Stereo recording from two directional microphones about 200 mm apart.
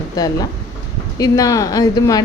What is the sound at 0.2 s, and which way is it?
A woman's voice, 20° left (ahead or behind).